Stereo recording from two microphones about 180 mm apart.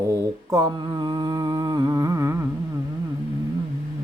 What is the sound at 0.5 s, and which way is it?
Music, 20° right (ahead or behind).